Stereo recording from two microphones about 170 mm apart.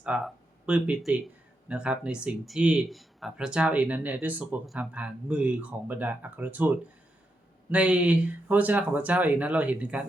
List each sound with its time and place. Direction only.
0.0 s speech: 5° right (ahead or behind)